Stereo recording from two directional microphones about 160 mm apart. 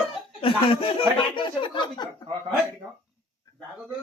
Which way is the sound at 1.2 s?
30° left (ahead or behind).